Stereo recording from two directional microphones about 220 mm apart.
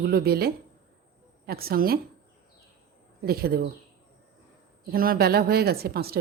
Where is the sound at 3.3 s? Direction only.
45° right (ahead or behind).